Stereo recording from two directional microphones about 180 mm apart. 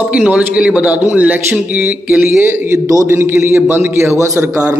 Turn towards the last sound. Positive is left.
turn(degrees=-15)  # may be behind; listen again after turning